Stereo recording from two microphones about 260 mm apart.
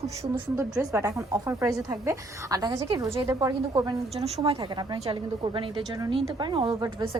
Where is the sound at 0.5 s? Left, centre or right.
Centre.